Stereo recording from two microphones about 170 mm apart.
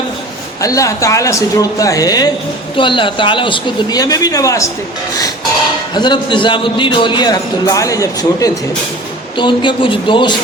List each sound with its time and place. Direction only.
0.6 s a man's voice: 20° left (ahead or behind)
5.9 s a man's voice: 25° left (ahead or behind)